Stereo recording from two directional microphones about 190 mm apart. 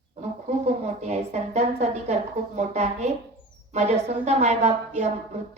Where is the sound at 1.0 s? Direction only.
35° right (ahead or behind).